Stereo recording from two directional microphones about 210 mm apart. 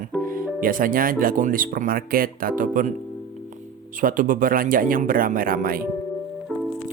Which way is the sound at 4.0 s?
40° right (ahead or behind).